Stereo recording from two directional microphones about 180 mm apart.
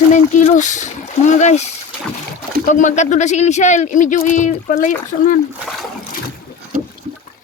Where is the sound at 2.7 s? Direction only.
40° left (ahead or behind).